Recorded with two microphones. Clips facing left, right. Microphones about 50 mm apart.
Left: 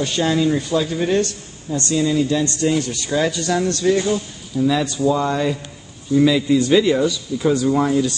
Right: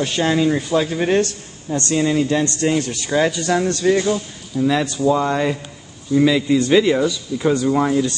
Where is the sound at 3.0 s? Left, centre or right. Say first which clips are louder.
Right 3 dB; right.